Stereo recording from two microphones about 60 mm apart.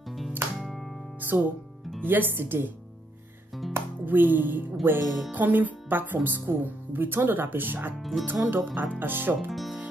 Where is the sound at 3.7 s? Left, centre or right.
Right.